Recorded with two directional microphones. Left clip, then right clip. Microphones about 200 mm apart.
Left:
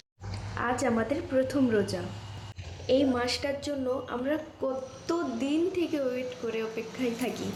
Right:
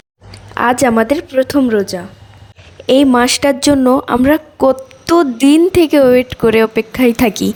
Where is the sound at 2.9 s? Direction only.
60° right (ahead or behind).